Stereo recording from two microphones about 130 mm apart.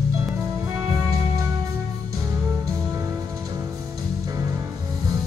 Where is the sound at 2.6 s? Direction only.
25° right (ahead or behind).